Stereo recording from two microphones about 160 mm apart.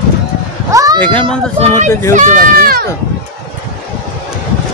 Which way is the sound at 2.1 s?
60° right (ahead or behind).